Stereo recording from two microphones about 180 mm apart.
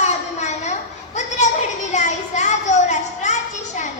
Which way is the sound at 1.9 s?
40° left (ahead or behind).